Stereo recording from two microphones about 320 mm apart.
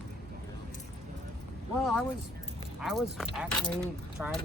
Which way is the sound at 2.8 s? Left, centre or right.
Centre.